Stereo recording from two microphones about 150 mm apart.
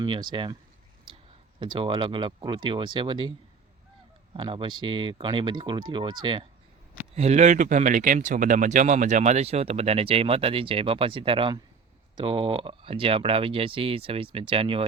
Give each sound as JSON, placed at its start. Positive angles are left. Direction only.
{"t": 0.0, "sound": "speech", "side_deg": -30}
{"t": 1.1, "sound": "a sound", "side_deg": -35}
{"t": 1.5, "sound": "speech", "side_deg": -35}
{"t": 4.4, "sound": "speech", "side_deg": -35}
{"t": 7.2, "sound": "speech", "side_deg": -50}